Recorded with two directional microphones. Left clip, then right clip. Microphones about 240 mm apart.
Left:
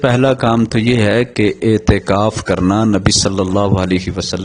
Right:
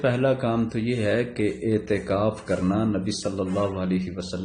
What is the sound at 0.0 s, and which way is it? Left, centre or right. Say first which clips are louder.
A man's voice: left 10 dB; left.